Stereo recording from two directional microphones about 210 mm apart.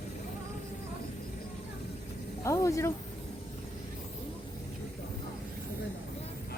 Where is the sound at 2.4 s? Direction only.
15° left (ahead or behind).